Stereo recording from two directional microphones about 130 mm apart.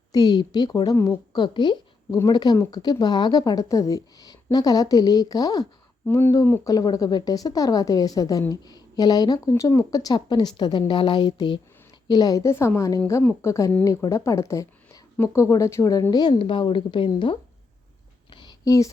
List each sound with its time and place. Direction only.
0.1 s a woman's voice: 30° left (ahead or behind)
6.1 s a woman's voice: 20° left (ahead or behind); by 17.3 s 35° left (ahead or behind)
18.3 s a sound: 35° left (ahead or behind)